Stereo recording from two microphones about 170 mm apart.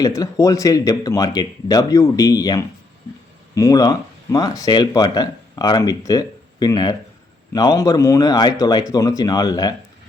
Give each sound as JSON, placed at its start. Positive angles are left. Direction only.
{"t": 0.0, "sound": "speech", "side_deg": 20}